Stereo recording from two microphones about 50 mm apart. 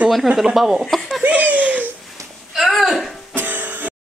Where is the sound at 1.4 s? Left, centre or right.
Right.